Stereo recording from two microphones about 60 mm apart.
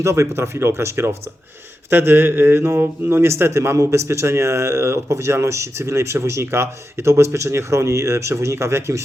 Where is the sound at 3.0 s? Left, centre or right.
Right.